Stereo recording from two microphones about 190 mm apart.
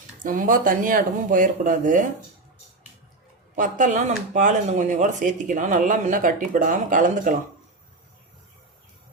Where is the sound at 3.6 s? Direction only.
40° right (ahead or behind).